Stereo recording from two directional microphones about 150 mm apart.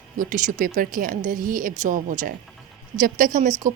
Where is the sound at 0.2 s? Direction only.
65° right (ahead or behind).